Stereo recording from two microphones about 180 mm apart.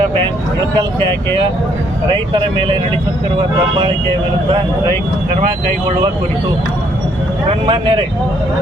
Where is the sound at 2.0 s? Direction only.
25° right (ahead or behind).